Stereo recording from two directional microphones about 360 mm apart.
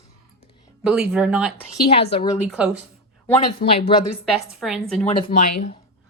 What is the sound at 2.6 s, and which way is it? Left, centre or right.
Speech, centre.